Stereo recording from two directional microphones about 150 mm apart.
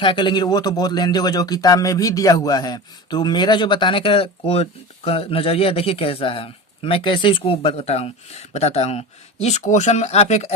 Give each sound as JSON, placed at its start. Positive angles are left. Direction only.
{"t": 0.0, "sound": "speech", "side_deg": 35}